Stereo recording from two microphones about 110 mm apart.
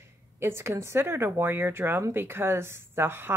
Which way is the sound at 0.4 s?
25° right (ahead or behind).